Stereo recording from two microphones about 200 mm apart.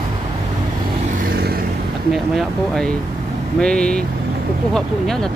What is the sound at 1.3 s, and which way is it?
Vehicle, 50° right (ahead or behind).